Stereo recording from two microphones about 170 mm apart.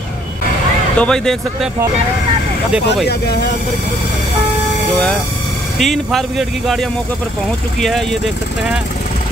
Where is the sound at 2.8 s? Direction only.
75° left (ahead or behind).